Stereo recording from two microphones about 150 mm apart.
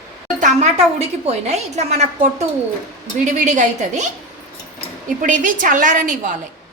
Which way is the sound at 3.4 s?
50° right (ahead or behind).